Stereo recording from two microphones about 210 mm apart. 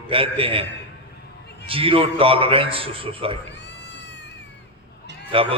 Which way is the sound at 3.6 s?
55° left (ahead or behind).